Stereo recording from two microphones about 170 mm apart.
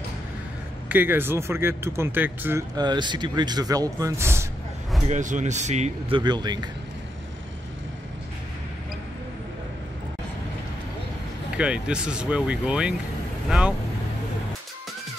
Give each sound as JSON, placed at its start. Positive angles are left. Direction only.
{"t": 0.8, "sound": "speech", "side_deg": -10}
{"t": 2.7, "sound": "speech", "side_deg": -25}
{"t": 5.0, "sound": "speech", "side_deg": -45}
{"t": 6.1, "sound": "speech", "side_deg": -25}
{"t": 11.5, "sound": "speech", "side_deg": -5}